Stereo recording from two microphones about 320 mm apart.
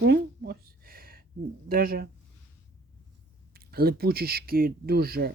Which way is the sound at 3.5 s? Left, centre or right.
Right.